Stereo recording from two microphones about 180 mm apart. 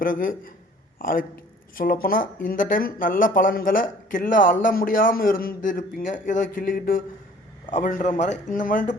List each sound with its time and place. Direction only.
0.0 s a man's voice: 50° left (ahead or behind)